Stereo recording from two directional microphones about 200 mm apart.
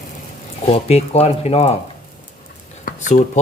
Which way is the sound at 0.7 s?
30° left (ahead or behind).